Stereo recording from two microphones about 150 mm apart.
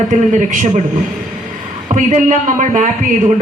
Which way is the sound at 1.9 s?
55° right (ahead or behind).